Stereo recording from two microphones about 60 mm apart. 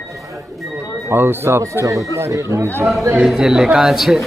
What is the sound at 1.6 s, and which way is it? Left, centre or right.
Speech, right.